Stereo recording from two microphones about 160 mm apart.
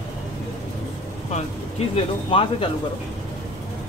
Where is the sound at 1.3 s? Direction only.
45° left (ahead or behind).